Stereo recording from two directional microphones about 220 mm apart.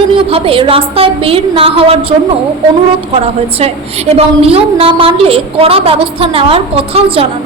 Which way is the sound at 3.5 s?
25° right (ahead or behind).